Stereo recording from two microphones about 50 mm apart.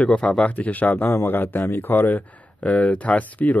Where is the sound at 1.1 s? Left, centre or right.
Left.